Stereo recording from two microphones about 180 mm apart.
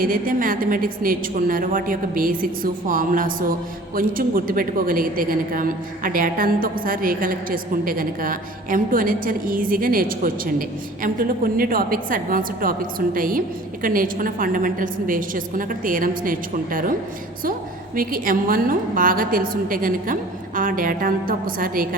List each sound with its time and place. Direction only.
0.0 s a woman's voice: 50° right (ahead or behind)
17.9 s a woman's voice: 50° right (ahead or behind)